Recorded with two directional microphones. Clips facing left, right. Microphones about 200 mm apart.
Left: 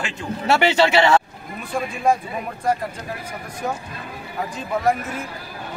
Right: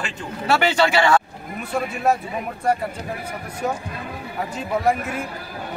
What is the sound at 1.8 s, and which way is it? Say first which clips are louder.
Speech: left 1 dB; 5° right (ahead or behind).